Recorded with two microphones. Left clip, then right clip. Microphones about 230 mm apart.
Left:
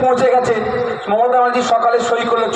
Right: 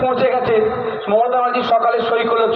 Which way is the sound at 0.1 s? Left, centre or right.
Left.